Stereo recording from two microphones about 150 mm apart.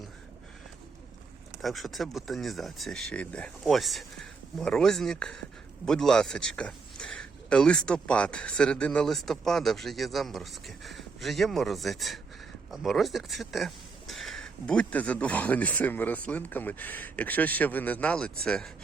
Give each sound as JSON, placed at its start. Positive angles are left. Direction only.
{"t": 1.6, "sound": "speech", "side_deg": 0}